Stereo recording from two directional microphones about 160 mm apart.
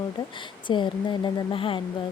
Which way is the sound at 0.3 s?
30° left (ahead or behind).